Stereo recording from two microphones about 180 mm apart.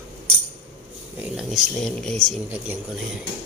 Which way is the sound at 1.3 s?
Centre (ahead or behind).